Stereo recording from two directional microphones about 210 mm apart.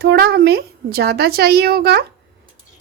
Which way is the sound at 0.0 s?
50° right (ahead or behind).